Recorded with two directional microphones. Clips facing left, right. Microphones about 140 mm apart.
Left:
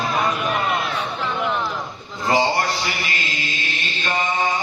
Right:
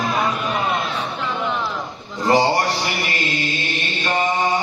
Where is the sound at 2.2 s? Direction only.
35° right (ahead or behind).